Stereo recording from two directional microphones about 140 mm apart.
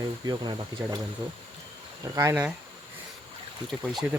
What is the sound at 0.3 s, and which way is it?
Speech, 30° right (ahead or behind).